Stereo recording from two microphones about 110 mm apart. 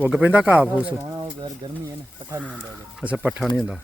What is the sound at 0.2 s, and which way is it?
Speech, 15° right (ahead or behind).